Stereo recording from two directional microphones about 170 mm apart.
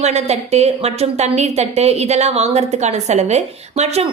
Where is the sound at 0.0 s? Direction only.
40° right (ahead or behind).